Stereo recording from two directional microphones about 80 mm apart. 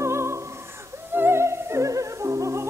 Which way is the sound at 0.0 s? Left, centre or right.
Right.